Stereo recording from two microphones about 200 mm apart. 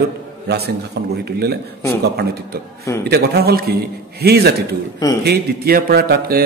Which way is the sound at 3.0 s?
50° right (ahead or behind).